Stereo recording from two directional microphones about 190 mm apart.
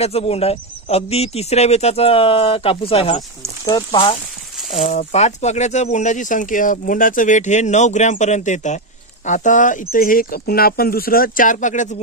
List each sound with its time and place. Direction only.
0.0 s speech: 30° left (ahead or behind)
4.6 s a sound: centre (ahead or behind)
4.8 s speech: 35° left (ahead or behind)